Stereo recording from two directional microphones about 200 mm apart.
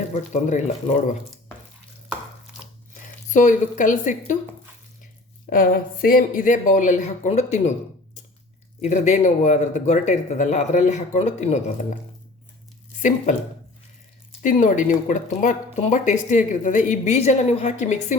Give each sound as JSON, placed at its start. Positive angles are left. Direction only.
{"t": 0.1, "sound": "speech", "side_deg": 35}
{"t": 3.3, "sound": "speech", "side_deg": 40}
{"t": 5.5, "sound": "speech", "side_deg": 45}
{"t": 8.8, "sound": "speech", "side_deg": 35}
{"t": 13.0, "sound": "speech", "side_deg": 40}
{"t": 14.4, "sound": "speech", "side_deg": 40}